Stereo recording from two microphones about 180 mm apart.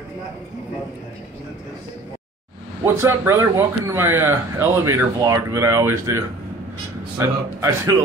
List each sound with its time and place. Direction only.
2.8 s speech: 15° right (ahead or behind)